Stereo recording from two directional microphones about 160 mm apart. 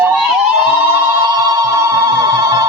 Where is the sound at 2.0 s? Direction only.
20° right (ahead or behind).